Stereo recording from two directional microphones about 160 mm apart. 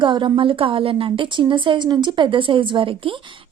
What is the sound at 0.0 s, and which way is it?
A woman's voice, 30° right (ahead or behind).